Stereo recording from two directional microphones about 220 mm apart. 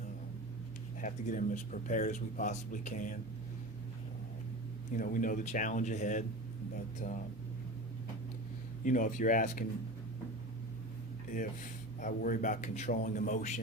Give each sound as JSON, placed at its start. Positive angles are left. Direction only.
{"t": 1.0, "sound": "speech", "side_deg": 35}
{"t": 4.9, "sound": "speech", "side_deg": 40}
{"t": 8.8, "sound": "speech", "side_deg": 35}
{"t": 11.9, "sound": "speech", "side_deg": 35}